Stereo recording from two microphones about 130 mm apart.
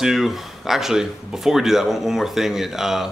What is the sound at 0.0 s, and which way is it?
Speech, centre (ahead or behind).